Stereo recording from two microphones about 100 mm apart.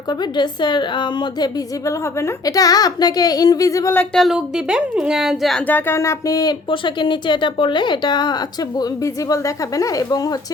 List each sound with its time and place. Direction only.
0.1 s a woman's voice: 45° left (ahead or behind)
4.1 s speech: centre (ahead or behind)
5.6 s speech: 20° left (ahead or behind); by 6.6 s 40° left (ahead or behind)
6.7 s a woman's voice: 50° left (ahead or behind)